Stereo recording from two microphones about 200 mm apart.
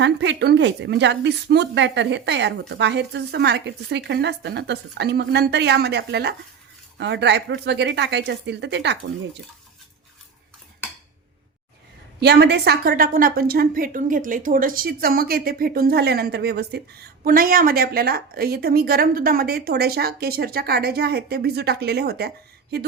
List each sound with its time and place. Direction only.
0.0 s a woman's voice: 65° right (ahead or behind)
12.2 s a woman's voice: 55° right (ahead or behind)